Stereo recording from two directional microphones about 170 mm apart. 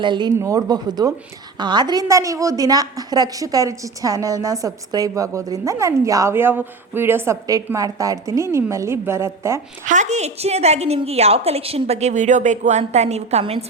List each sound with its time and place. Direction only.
0.0 s a woman's voice: 25° right (ahead or behind)
9.8 s a woman's voice: 45° right (ahead or behind)